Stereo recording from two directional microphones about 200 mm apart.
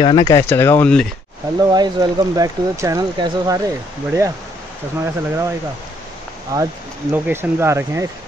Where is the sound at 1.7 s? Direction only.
20° right (ahead or behind).